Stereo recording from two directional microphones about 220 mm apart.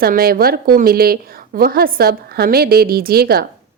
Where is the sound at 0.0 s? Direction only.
45° right (ahead or behind).